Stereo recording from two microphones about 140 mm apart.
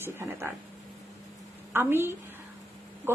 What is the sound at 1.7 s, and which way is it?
Speech, 15° right (ahead or behind).